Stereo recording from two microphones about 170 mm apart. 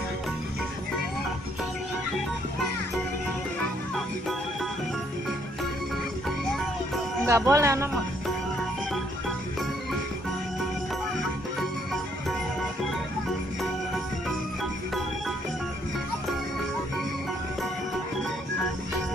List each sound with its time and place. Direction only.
7.2 s speech: 15° right (ahead or behind)